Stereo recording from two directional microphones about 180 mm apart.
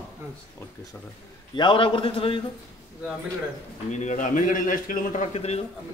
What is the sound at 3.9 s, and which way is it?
Speech, 40° left (ahead or behind).